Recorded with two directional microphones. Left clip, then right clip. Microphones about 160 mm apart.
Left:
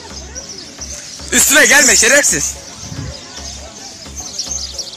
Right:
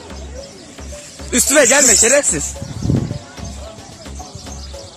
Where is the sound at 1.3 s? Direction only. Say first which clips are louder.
Left 3 dB; centre (ahead or behind).